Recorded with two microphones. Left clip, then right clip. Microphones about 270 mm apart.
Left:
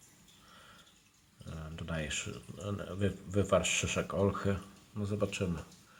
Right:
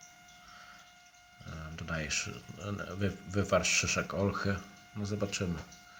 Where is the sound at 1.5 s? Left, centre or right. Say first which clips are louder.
Right 2 dB; centre.